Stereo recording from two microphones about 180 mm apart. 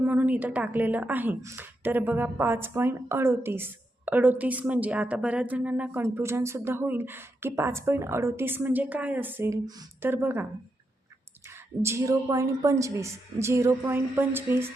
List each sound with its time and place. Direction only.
0.0 s speech: 10° right (ahead or behind)
11.8 s speech: 15° right (ahead or behind)